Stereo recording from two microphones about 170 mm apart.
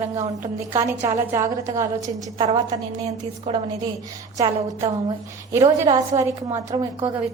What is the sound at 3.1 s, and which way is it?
Speech, 35° right (ahead or behind).